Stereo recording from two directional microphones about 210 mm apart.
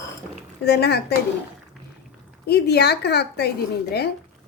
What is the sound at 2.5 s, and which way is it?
A woman's voice, 50° left (ahead or behind).